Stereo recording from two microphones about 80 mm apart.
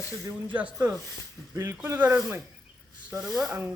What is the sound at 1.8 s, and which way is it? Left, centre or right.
Speech, right.